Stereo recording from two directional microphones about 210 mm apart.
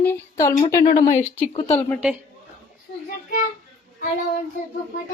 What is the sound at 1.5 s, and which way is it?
Speech, 30° left (ahead or behind).